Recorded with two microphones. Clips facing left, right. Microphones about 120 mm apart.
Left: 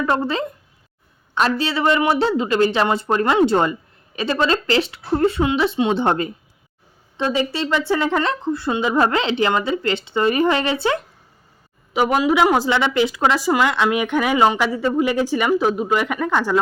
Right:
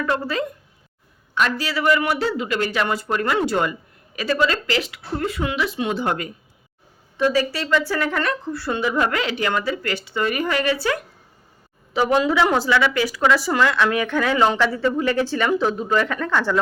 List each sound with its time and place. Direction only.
0.0 s speech: 25° left (ahead or behind)
11.9 s speech: 15° left (ahead or behind)